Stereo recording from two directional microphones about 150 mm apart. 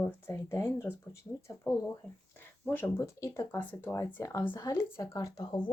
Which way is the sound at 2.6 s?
15° left (ahead or behind).